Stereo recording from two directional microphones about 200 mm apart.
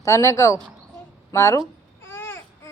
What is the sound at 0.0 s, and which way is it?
Speech, 15° left (ahead or behind).